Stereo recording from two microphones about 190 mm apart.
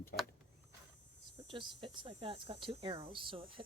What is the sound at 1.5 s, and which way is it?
Speech, 25° right (ahead or behind).